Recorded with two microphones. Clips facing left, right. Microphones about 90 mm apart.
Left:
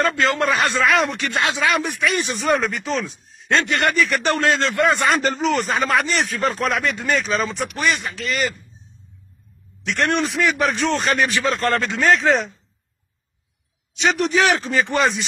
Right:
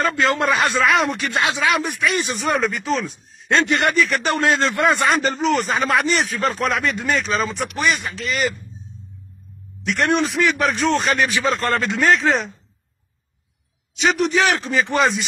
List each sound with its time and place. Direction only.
0.5 s speech: centre (ahead or behind)
3.5 s a man's voice: 15° right (ahead or behind)
3.8 s speech: centre (ahead or behind)
4.4 s a man's voice: 15° right (ahead or behind)
4.9 s speech: centre (ahead or behind)
9.8 s speech: centre (ahead or behind)
13.9 s speech: centre (ahead or behind)